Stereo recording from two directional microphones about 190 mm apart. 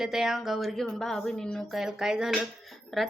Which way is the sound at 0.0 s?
Centre (ahead or behind).